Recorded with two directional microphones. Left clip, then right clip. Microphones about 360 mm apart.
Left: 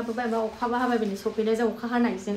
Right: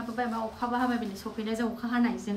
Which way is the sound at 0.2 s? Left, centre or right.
Centre.